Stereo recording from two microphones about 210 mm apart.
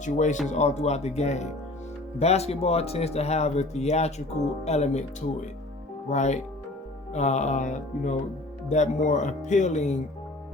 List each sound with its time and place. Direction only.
0.0 s speech: 35° left (ahead or behind)
6.1 s speech: 35° left (ahead or behind)